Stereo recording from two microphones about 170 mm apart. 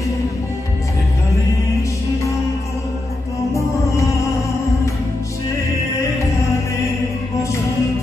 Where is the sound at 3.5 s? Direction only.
20° left (ahead or behind).